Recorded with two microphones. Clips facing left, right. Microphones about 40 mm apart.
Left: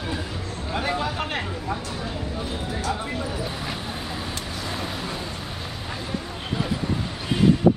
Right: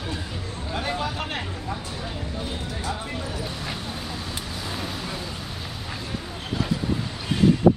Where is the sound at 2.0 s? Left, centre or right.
Centre.